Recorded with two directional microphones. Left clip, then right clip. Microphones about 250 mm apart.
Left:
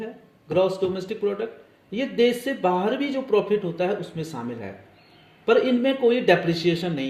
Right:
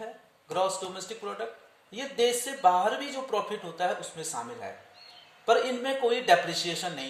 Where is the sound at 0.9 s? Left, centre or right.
Right.